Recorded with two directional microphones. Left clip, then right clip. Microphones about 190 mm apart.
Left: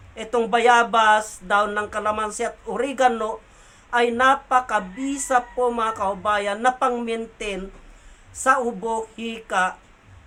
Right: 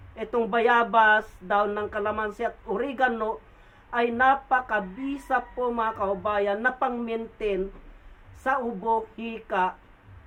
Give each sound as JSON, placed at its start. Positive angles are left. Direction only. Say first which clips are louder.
{"t": 0.2, "sound": "a woman's voice", "louder": "left 4 dB", "side_deg": 20}